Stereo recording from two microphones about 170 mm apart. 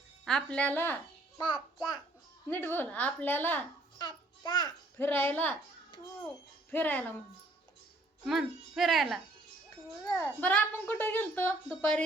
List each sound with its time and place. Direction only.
0.3 s a woman's voice: 5° left (ahead or behind)
1.4 s a child's voice: 30° left (ahead or behind)
2.5 s a woman's voice: 10° left (ahead or behind)
3.9 s babbling: 25° left (ahead or behind)
4.9 s a woman's voice: 10° left (ahead or behind)
6.7 s a woman's voice: 10° left (ahead or behind)
8.2 s a woman's voice: centre (ahead or behind)